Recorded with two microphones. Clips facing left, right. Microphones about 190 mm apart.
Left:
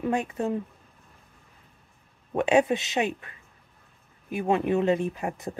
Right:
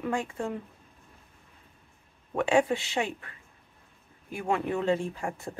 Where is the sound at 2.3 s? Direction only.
20° left (ahead or behind).